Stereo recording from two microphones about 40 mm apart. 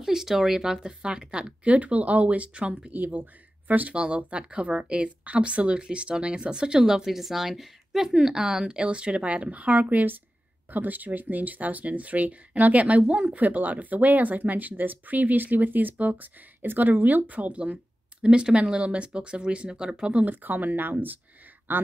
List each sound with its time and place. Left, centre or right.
0.0 s speech: centre
1.6 s speech: right
2.9 s speech: right
3.9 s a woman's voice: right
6.8 s a woman's voice: centre; by 17.7 s right
18.2 s a woman's voice: right
20.2 s speech: right